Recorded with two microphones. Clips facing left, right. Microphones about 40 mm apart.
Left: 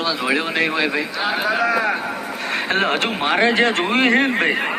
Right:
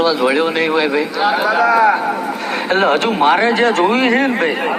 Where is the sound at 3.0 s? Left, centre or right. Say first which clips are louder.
Right 7 dB; centre.